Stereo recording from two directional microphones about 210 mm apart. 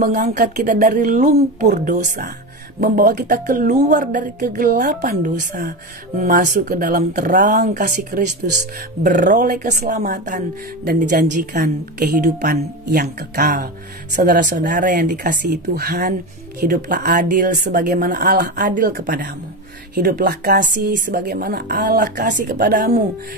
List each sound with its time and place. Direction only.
0.0 s speech: 40° right (ahead or behind)